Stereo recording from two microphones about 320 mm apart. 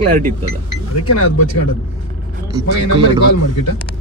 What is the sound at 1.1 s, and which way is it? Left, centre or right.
Speech, left.